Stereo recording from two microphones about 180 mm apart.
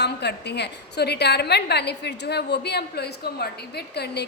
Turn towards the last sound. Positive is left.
turn(degrees=65)  # may be behind; listen again after turning